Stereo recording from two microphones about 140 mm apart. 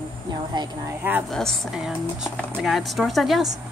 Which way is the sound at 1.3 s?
5° left (ahead or behind).